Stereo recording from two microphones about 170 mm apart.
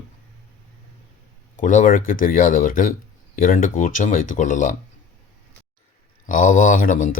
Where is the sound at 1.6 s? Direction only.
50° left (ahead or behind).